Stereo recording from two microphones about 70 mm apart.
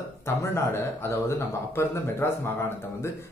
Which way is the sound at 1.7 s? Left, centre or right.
Left.